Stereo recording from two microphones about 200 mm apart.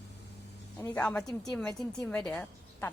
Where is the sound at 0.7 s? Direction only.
10° left (ahead or behind).